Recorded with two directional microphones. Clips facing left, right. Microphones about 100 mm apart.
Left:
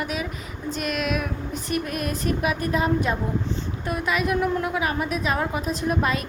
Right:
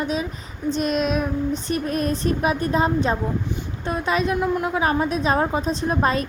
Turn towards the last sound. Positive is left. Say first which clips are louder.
# right 3 dB
turn(degrees=-35)  # may be behind; listen again after turning